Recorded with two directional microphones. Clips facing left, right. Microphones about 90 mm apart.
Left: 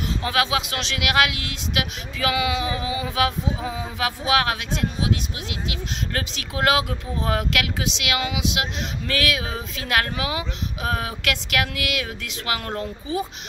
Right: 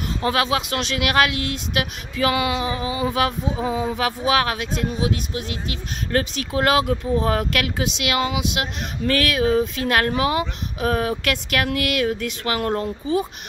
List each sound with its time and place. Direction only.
0.2 s speech: 35° right (ahead or behind)